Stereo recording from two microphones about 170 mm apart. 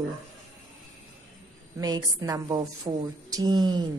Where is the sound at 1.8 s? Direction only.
20° right (ahead or behind).